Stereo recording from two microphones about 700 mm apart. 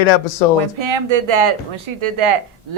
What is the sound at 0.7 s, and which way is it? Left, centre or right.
A woman's voice, right.